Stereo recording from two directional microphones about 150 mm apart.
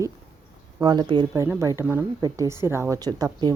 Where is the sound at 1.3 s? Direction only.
20° right (ahead or behind).